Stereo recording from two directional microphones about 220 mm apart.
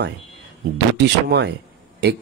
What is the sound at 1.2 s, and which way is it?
Speech, 45° right (ahead or behind).